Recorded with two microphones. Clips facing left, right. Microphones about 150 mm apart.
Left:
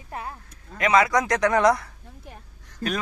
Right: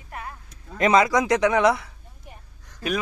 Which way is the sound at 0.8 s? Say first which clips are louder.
Right 2 dB; 25° right (ahead or behind).